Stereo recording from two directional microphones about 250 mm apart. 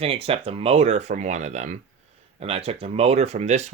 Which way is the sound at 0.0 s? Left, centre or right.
Right.